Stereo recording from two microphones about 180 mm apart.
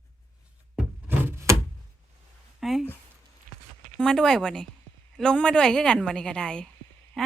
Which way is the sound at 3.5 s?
50° right (ahead or behind).